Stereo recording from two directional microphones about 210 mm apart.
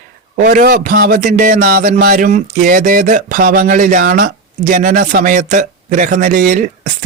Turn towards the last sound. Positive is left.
turn(degrees=-40)  # may be behind; listen again after turning